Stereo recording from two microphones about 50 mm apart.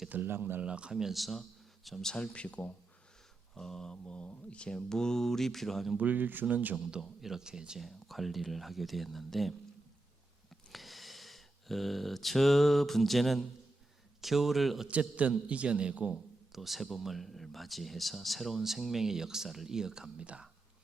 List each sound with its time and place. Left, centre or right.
0.1 s speech: right
0.6 s speech: right; by 2.1 s centre
2.1 s speech: left
3.5 s speech: centre
3.9 s speech: left; by 6.0 s centre
6.0 s speech: right
7.0 s speech: centre
7.8 s speech: centre
14.8 s a man's voice: right
16.1 s speech: centre